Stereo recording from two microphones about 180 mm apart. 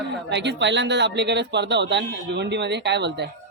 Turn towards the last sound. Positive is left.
turn(degrees=-70)  # may be behind; listen again after turning